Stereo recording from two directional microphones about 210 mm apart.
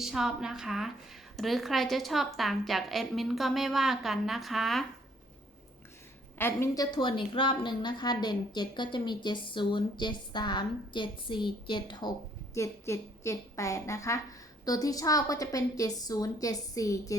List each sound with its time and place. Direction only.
0.0 s a woman's voice: 5° right (ahead or behind)
6.4 s a woman's voice: 15° left (ahead or behind)